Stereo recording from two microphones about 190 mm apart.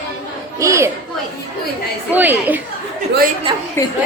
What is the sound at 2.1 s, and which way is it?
Speech, 10° right (ahead or behind).